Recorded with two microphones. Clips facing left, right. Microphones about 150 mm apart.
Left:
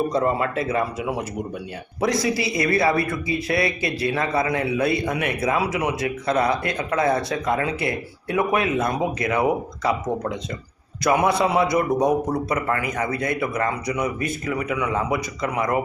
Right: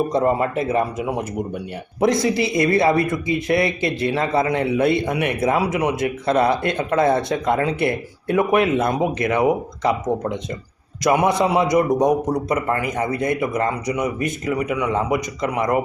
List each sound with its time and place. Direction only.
0.6 s a man's voice: 20° right (ahead or behind)
2.0 s a man's voice: 25° right (ahead or behind)